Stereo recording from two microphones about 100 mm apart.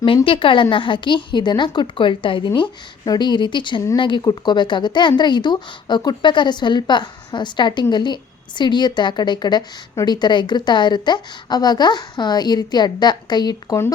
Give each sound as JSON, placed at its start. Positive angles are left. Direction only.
{"t": 0.3, "sound": "speech", "side_deg": 60}